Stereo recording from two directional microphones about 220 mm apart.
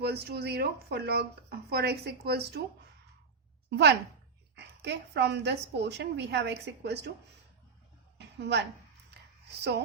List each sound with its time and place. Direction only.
0.0 s speech: 45° right (ahead or behind)
3.7 s speech: 50° right (ahead or behind)
8.4 s speech: 50° right (ahead or behind)
9.0 s a sound: 50° right (ahead or behind)